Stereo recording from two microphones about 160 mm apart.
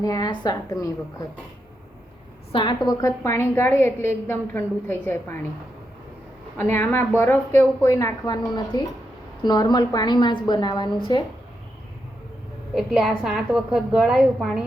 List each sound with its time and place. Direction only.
0.0 s a woman's voice: 25° left (ahead or behind)
2.5 s a woman's voice: 30° left (ahead or behind); by 5.4 s 15° left (ahead or behind)
6.6 s a woman's voice: 15° left (ahead or behind); by 11.2 s 30° left (ahead or behind)
12.7 s a woman's voice: centre (ahead or behind)